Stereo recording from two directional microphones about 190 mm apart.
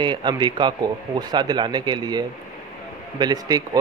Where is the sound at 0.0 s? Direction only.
25° right (ahead or behind).